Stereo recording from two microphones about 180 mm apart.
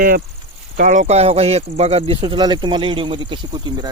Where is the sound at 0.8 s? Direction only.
45° right (ahead or behind).